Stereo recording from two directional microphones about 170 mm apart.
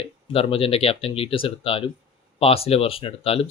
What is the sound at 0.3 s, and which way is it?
Speech, 35° left (ahead or behind).